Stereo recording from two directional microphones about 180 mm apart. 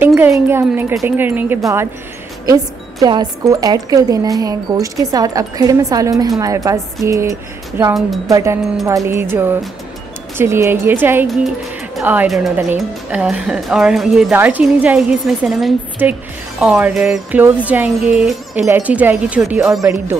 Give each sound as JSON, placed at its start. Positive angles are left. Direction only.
{"t": 0.0, "sound": "a woman's voice", "side_deg": -15}
{"t": 11.2, "sound": "a woman's voice", "side_deg": 0}